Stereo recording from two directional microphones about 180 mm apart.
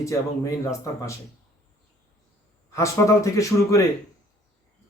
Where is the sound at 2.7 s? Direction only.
15° left (ahead or behind).